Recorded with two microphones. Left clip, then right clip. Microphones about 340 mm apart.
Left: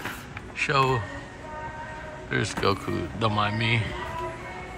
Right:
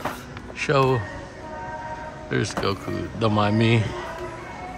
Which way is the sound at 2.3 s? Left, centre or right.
Centre.